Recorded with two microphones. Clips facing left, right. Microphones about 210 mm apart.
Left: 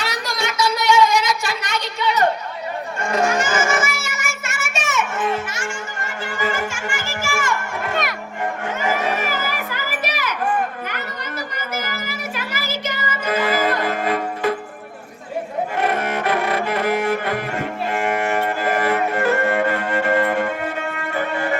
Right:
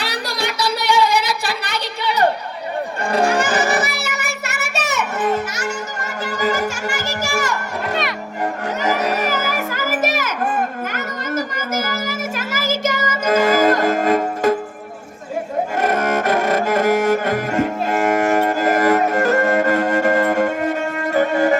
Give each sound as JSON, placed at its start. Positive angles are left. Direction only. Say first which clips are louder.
{"t": 0.0, "sound": "a sound", "louder": "right 1 dB", "side_deg": -35}
{"t": 3.0, "sound": "music", "louder": "right 2 dB", "side_deg": -35}
{"t": 8.8, "sound": "children playing", "louder": "right 3 dB", "side_deg": -40}
{"t": 10.9, "sound": "music", "louder": "right 6 dB", "side_deg": -45}
{"t": 15.8, "sound": "music", "louder": "right 3 dB", "side_deg": -45}